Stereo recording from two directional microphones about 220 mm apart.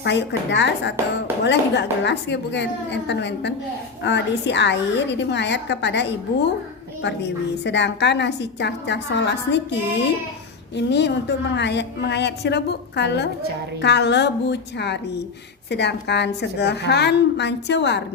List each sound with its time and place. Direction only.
0.0 s a woman's voice: 50° left (ahead or behind)
10.8 s a woman's voice: 50° left (ahead or behind)